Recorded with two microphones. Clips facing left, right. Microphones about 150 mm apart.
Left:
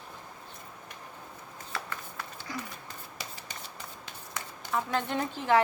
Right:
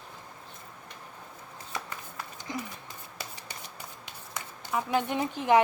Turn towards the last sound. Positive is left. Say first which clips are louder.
# right 2 dB
turn(degrees=-15)  # may be behind; listen again after turning